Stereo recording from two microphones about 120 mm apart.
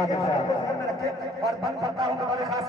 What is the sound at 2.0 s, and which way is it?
Speech, 25° right (ahead or behind).